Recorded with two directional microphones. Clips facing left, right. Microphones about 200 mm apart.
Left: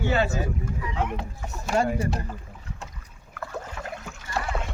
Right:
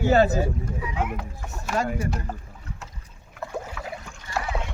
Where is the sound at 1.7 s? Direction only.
30° left (ahead or behind).